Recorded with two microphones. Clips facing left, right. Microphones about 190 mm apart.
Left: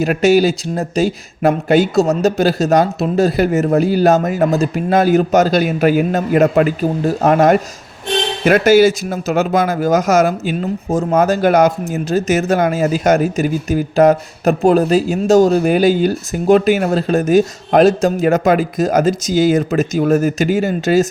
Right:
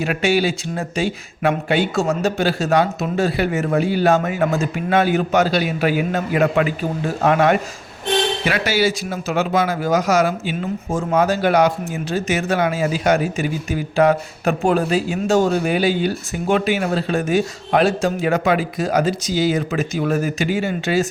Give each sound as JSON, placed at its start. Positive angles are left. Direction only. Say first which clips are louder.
{"t": 0.0, "sound": "speech", "louder": "left 6 dB", "side_deg": 40}